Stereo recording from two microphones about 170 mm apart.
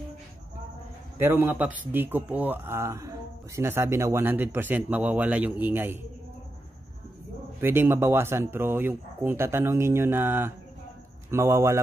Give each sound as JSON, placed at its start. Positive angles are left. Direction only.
{"t": 1.1, "sound": "speech", "side_deg": -15}
{"t": 7.6, "sound": "speech", "side_deg": -15}